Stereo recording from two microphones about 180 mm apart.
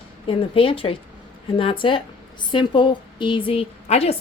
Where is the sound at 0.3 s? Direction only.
30° left (ahead or behind).